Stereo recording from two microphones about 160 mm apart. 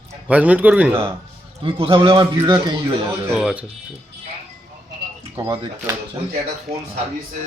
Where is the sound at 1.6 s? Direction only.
35° right (ahead or behind).